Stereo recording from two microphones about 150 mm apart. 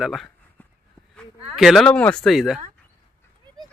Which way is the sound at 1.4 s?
Centre (ahead or behind).